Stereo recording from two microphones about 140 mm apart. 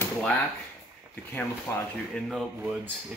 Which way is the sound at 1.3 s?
15° left (ahead or behind).